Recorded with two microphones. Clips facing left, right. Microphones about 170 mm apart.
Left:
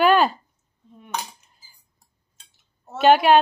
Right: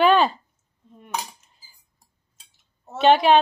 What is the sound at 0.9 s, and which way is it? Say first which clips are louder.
Cutlery: even; centre (ahead or behind).